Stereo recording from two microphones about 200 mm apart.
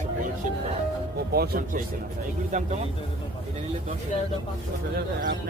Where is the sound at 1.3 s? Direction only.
45° right (ahead or behind).